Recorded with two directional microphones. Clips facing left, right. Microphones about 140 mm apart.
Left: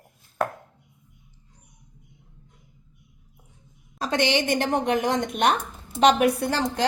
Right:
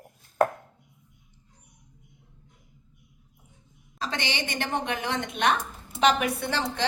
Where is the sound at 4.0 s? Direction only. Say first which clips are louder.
Left 8 dB; 50° left (ahead or behind).